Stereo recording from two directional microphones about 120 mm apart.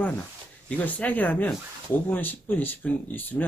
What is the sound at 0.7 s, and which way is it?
Speech, 10° left (ahead or behind).